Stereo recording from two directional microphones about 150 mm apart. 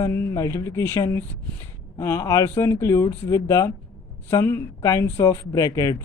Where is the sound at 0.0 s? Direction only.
20° left (ahead or behind).